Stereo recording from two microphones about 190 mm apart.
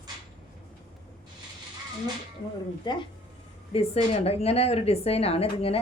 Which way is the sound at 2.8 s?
25° left (ahead or behind).